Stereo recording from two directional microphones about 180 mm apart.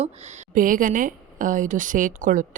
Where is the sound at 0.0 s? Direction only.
40° right (ahead or behind).